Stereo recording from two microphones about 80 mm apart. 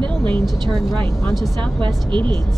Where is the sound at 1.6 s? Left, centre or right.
Right.